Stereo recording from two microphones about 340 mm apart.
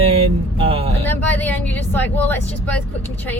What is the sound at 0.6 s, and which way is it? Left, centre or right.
Speech, centre.